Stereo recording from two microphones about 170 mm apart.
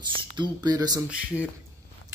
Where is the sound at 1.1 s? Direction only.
10° right (ahead or behind).